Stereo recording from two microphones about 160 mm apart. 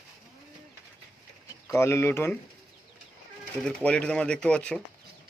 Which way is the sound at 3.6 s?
5° left (ahead or behind).